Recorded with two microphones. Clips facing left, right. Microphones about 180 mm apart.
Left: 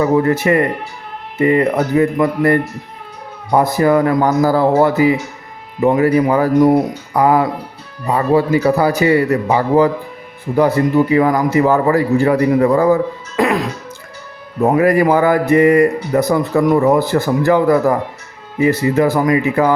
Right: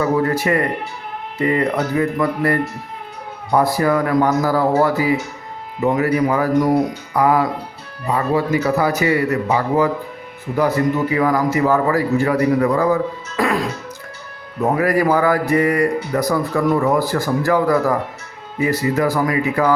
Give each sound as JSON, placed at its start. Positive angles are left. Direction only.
{"t": 0.3, "sound": "speech", "side_deg": 25}
{"t": 8.6, "sound": "a man's voice", "side_deg": 30}
{"t": 14.6, "sound": "speech", "side_deg": 25}